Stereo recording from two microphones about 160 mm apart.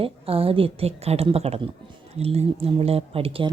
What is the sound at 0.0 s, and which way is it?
A woman's voice, 35° right (ahead or behind).